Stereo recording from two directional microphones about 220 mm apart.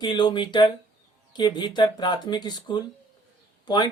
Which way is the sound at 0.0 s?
20° left (ahead or behind).